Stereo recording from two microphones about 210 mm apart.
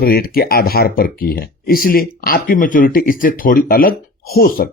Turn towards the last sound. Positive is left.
turn(degrees=45)  # may be behind; listen again after turning